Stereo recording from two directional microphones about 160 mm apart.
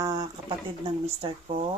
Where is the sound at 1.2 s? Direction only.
35° right (ahead or behind).